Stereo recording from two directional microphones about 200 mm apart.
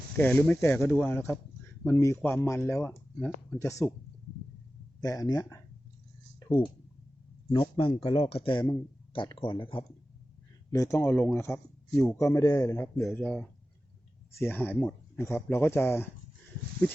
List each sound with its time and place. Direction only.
0.2 s speech: 10° left (ahead or behind)
4.9 s speech: 15° left (ahead or behind)
7.5 s speech: 25° left (ahead or behind)
10.7 s speech: 15° left (ahead or behind)
13.0 s speech: 5° left (ahead or behind)